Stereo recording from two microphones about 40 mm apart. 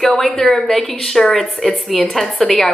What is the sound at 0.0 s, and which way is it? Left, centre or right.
Speech, centre.